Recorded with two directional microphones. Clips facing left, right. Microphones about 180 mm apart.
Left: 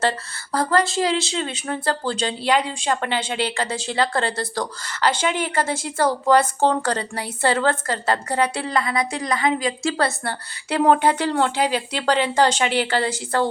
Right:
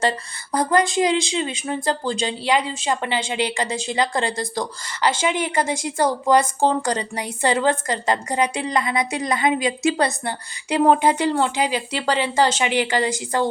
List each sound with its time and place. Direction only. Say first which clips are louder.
0.5 s speech: right 1 dB; 20° right (ahead or behind)